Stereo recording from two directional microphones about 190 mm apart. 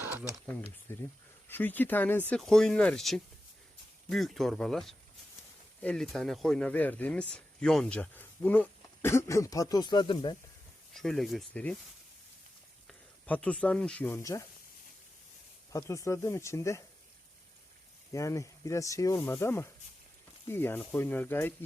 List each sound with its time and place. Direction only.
0.9 s speech: 10° left (ahead or behind)
10.9 s speech: centre (ahead or behind)
12.9 s speech: 5° left (ahead or behind)
15.7 s speech: 15° left (ahead or behind)
18.1 s speech: 15° left (ahead or behind)